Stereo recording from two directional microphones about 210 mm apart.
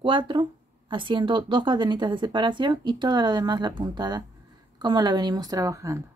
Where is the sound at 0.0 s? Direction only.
25° right (ahead or behind).